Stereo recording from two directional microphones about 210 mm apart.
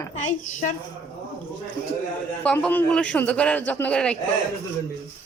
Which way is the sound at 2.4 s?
5° left (ahead or behind).